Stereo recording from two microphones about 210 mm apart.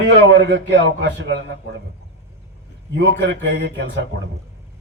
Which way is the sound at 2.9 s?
55° right (ahead or behind).